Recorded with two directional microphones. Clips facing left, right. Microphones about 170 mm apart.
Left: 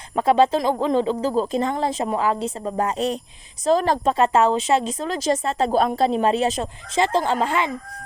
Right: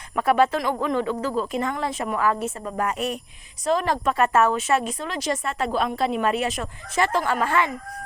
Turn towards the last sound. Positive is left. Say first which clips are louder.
# left 1 dB
turn(degrees=20)  # may be behind; listen again after turning